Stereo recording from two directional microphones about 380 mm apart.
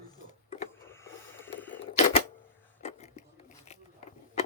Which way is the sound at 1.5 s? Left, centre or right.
Centre.